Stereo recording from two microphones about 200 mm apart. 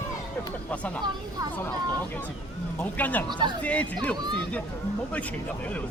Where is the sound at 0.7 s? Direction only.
5° left (ahead or behind).